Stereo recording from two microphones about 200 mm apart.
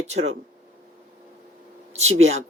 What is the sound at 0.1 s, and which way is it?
Speech, 30° right (ahead or behind).